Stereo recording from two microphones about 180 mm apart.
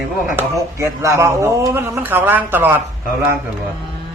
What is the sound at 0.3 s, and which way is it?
A man's voice, 15° right (ahead or behind).